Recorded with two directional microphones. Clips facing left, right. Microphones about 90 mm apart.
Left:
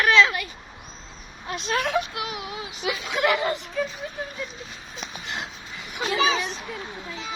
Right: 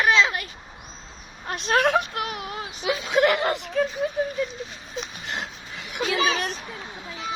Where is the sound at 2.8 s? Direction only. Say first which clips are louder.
Right 3 dB; 30° right (ahead or behind).